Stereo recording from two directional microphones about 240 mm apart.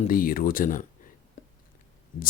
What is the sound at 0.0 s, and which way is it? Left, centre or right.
Speech, left.